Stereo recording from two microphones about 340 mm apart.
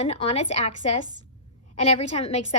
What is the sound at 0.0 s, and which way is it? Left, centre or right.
A woman's voice, centre.